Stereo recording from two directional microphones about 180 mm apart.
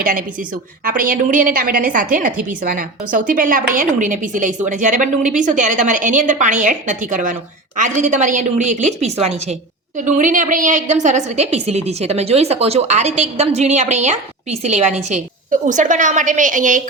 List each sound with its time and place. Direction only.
0.0 s a woman's voice: 50° right (ahead or behind)